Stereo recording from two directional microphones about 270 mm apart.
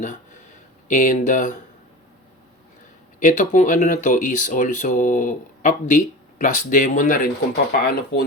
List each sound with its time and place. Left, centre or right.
0.9 s speech: left
3.2 s speech: left